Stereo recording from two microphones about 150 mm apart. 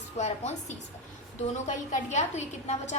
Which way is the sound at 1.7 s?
55° left (ahead or behind).